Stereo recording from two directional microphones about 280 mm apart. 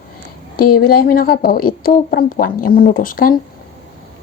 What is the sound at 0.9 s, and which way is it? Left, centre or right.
Speech, left.